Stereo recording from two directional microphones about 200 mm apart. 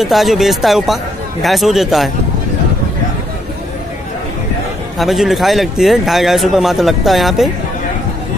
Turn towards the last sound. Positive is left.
turn(degrees=0)  # may be behind; listen again after turning